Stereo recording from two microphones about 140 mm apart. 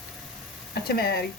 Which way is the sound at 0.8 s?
90° left.